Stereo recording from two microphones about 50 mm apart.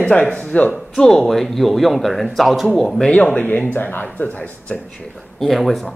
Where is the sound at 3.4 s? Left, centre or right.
Left.